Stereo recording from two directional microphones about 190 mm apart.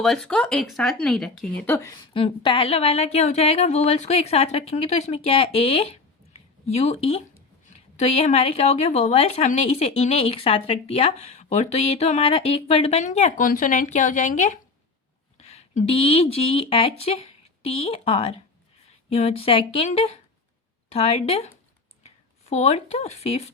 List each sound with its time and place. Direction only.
0.0 s speech: 5° left (ahead or behind)
2.1 s a woman's voice: 30° left (ahead or behind)